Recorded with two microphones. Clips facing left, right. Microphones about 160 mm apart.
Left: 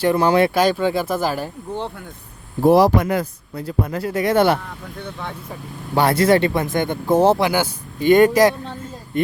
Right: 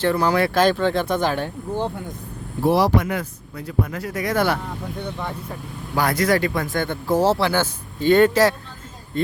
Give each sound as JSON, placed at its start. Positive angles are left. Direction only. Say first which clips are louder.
{"t": 0.0, "sound": "speech", "louder": "left 3 dB", "side_deg": 20}
{"t": 0.5, "sound": "speech", "louder": "even", "side_deg": 10}
{"t": 2.6, "sound": "speech", "louder": "left 5 dB", "side_deg": 45}
{"t": 5.9, "sound": "speech", "louder": "left 4 dB", "side_deg": 30}